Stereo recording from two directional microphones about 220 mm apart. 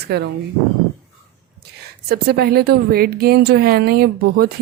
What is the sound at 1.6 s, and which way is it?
A woman's voice, 45° right (ahead or behind).